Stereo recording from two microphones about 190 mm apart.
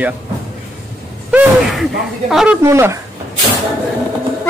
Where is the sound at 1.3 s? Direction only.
Centre (ahead or behind).